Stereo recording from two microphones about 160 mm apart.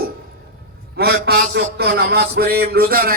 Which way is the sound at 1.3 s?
90° right.